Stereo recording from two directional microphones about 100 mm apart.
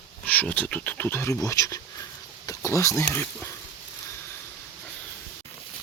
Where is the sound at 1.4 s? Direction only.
35° left (ahead or behind).